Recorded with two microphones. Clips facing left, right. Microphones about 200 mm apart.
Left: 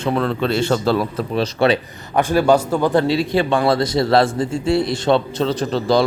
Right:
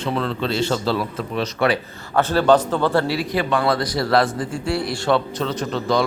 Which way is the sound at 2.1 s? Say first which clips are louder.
Left 1 dB; 10° left (ahead or behind).